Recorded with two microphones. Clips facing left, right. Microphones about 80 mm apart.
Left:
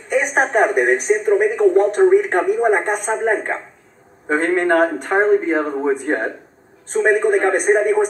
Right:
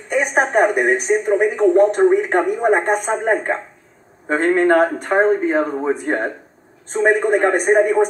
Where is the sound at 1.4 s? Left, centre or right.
Right.